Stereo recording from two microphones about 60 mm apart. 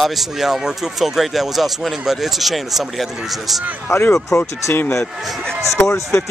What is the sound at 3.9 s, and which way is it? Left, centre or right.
Speech, left.